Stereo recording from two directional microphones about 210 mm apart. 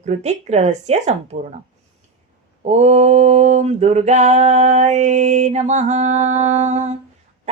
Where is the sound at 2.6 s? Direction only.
30° right (ahead or behind).